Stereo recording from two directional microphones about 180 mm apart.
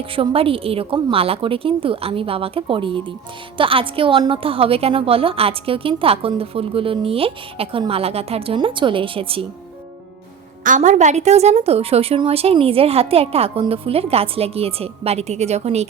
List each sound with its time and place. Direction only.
0.0 s a woman's voice: 30° right (ahead or behind)
10.6 s a woman's voice: 45° right (ahead or behind)